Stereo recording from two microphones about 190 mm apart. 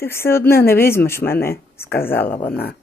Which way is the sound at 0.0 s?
15° left (ahead or behind).